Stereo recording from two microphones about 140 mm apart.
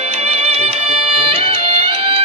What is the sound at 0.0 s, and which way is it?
Music, 50° right (ahead or behind).